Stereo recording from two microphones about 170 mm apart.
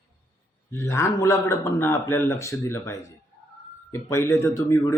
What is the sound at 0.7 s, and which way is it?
A man's voice, 15° left (ahead or behind).